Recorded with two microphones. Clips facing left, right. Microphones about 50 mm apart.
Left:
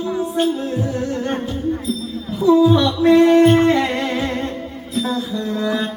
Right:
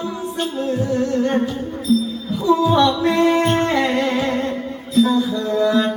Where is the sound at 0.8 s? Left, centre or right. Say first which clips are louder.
Right 3 dB; centre.